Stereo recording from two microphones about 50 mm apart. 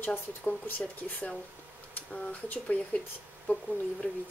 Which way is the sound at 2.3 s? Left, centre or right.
Left.